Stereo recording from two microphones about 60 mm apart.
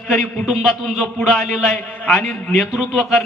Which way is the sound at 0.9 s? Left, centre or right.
Centre.